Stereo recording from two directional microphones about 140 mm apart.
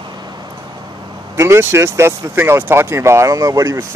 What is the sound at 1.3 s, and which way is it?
Speech, 20° right (ahead or behind).